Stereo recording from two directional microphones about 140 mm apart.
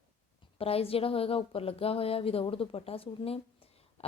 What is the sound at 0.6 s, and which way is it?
A woman's voice, 45° left (ahead or behind).